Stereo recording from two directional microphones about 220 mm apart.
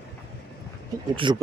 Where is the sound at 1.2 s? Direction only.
20° right (ahead or behind).